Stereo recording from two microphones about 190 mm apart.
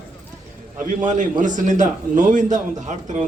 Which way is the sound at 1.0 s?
40° right (ahead or behind).